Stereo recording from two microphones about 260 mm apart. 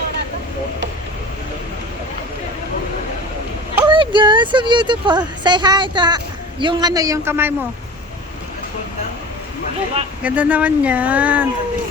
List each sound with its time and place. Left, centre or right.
3.8 s a man's voice: centre
10.2 s speech: centre